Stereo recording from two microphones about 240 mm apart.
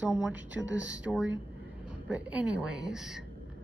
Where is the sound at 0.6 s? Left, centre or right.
Right.